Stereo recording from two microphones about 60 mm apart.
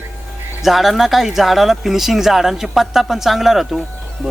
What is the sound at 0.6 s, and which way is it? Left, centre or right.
Speech, centre.